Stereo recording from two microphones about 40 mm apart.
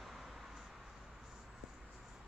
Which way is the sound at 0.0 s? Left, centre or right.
Centre.